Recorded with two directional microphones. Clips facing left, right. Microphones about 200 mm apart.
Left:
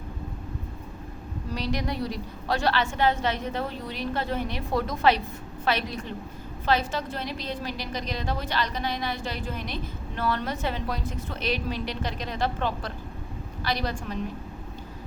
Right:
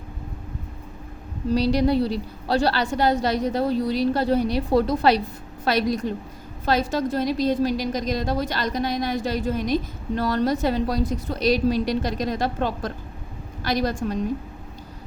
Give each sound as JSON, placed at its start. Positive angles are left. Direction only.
{"t": 1.5, "sound": "a woman's voice", "side_deg": -35}